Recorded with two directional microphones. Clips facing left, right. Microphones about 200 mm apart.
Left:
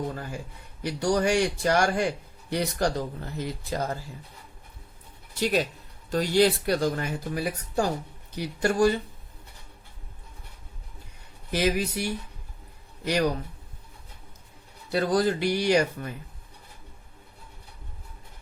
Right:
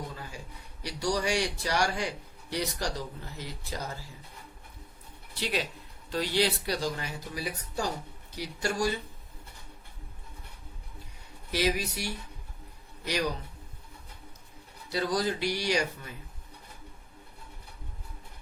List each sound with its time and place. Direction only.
0.1 s a man's voice: 55° left (ahead or behind)
5.3 s a man's voice: 45° left (ahead or behind)
11.5 s a man's voice: 50° left (ahead or behind)
14.8 s a man's voice: 55° left (ahead or behind)